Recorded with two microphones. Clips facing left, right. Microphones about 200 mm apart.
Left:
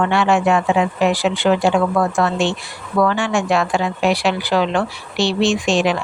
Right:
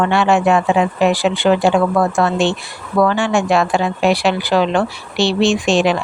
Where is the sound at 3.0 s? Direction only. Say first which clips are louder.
Right 3 dB; 30° right (ahead or behind).